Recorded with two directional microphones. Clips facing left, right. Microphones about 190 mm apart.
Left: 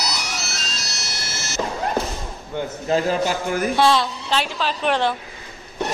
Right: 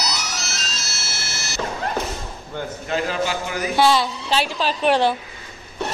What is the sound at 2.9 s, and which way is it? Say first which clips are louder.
Speech: left 3 dB; 45° left (ahead or behind).